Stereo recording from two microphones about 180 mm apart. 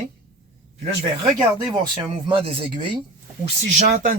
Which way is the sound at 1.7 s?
25° right (ahead or behind).